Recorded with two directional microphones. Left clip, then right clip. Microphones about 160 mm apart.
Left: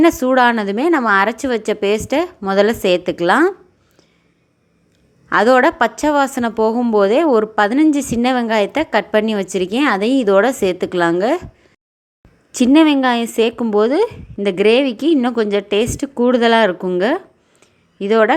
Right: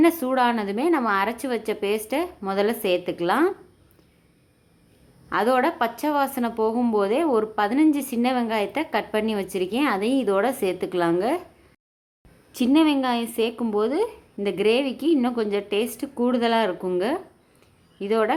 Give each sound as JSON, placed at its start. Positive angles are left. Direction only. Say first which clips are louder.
{"t": 0.0, "sound": "a woman's voice", "louder": "left 8 dB", "side_deg": 30}
{"t": 5.3, "sound": "a woman's voice", "louder": "left 9 dB", "side_deg": 35}
{"t": 12.5, "sound": "a woman's voice", "louder": "left 8 dB", "side_deg": 35}